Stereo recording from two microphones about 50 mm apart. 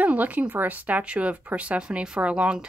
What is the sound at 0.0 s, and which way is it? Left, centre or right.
Speech, right.